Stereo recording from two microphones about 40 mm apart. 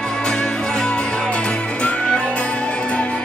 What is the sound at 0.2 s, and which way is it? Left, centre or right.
Music, centre.